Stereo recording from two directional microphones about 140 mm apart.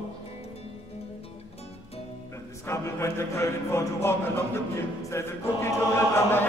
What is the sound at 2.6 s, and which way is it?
Music, 20° left (ahead or behind).